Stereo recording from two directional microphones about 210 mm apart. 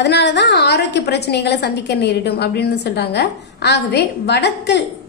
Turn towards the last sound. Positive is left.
turn(degrees=55)  # may be behind; listen again after turning